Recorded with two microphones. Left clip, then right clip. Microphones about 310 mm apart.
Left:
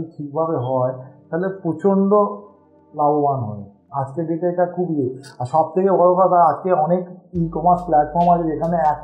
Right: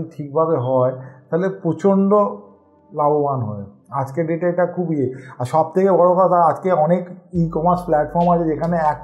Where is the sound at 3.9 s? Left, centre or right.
Right.